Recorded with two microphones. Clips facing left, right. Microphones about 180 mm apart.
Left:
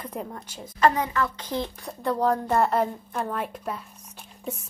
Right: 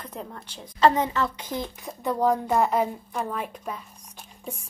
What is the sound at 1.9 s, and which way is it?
Speech, centre (ahead or behind).